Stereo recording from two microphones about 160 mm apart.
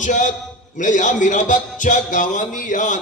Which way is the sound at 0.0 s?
50° left (ahead or behind).